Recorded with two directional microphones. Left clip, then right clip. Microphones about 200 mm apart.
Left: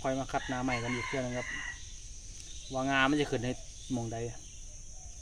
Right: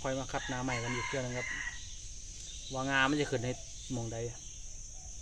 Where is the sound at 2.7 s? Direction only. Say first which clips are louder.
Left 2 dB; 25° left (ahead or behind).